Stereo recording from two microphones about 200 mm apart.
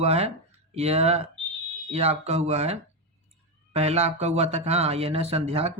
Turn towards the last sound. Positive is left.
turn(degrees=-30)  # may be behind; listen again after turning